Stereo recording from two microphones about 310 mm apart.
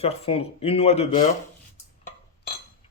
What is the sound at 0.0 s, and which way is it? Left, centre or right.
Speech, centre.